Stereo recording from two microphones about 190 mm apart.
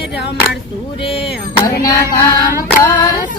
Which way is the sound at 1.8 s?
20° left (ahead or behind).